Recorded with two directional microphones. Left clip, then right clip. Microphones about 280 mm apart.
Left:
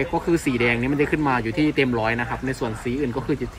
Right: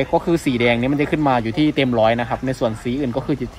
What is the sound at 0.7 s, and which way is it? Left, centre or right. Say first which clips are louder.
Speech: right 2 dB; right.